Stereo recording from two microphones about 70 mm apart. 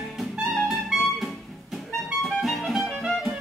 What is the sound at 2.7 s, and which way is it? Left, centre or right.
Music, centre.